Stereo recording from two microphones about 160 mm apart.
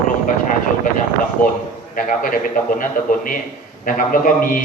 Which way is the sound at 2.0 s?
60° left (ahead or behind).